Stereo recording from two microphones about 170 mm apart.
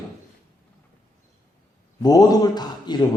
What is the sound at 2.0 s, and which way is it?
A man's voice, 20° left (ahead or behind).